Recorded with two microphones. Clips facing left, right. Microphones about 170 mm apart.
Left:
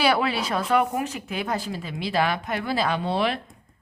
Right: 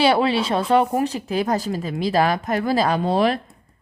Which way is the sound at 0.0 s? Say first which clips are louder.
Right 5 dB; 25° right (ahead or behind).